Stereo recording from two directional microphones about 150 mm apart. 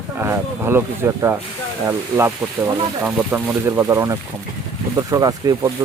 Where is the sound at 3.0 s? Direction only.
15° right (ahead or behind).